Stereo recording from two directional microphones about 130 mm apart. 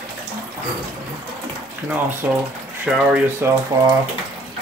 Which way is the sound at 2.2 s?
10° right (ahead or behind).